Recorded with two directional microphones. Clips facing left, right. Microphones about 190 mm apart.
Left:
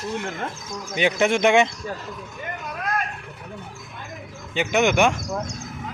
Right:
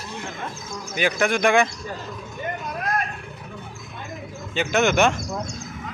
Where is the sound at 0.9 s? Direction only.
25° left (ahead or behind).